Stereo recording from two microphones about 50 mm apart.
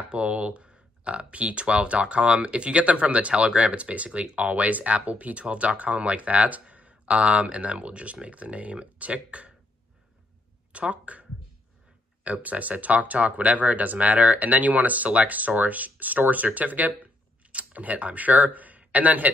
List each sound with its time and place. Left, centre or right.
0.1 s speech: right
10.7 s speech: right